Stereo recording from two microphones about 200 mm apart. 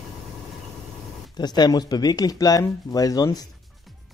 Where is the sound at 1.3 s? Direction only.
20° left (ahead or behind).